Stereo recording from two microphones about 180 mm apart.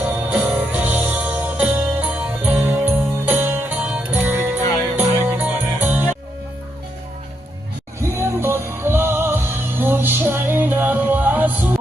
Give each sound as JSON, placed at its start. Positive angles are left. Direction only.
{"t": 0.0, "sound": "music", "side_deg": -10}
{"t": 8.0, "sound": "music", "side_deg": -15}